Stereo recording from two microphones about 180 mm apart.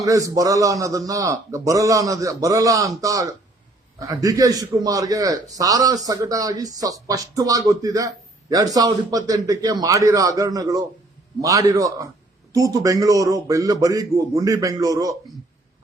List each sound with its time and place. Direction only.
0.0 s a man's voice: 20° right (ahead or behind)